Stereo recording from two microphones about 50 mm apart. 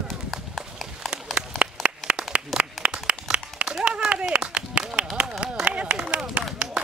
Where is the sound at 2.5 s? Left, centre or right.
Centre.